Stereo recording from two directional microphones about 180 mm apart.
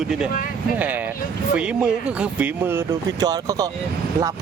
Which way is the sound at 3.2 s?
20° right (ahead or behind).